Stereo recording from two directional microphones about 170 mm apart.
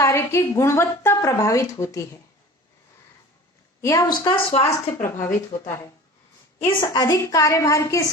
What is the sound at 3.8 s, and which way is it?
A woman's voice, 20° left (ahead or behind).